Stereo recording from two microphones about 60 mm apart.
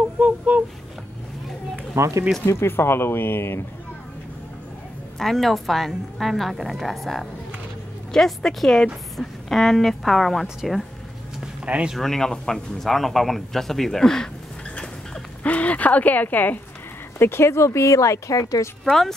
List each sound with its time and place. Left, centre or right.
2.0 s speech: right
2.4 s speech: left
5.2 s a woman's voice: centre
10.4 s a woman's voice: centre
11.6 s speech: centre
12.0 s a woman's voice: centre
15.4 s speech: left
17.2 s speech: left
18.9 s a woman's voice: centre